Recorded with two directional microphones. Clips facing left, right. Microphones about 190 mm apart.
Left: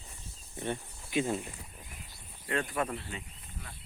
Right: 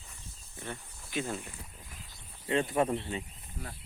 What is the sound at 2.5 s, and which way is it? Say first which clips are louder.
Speech: right 5 dB; 25° right (ahead or behind).